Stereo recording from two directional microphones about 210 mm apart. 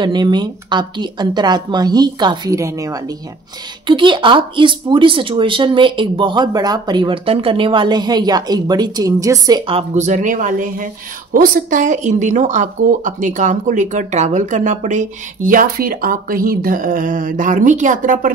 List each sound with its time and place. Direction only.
0.0 s speech: 20° right (ahead or behind); by 18.3 s 40° right (ahead or behind)